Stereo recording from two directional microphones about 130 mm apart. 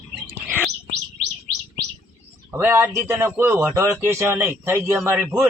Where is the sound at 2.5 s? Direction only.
15° right (ahead or behind).